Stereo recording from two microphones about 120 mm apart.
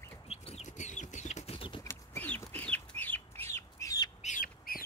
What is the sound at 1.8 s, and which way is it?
Chicken, 20° left (ahead or behind).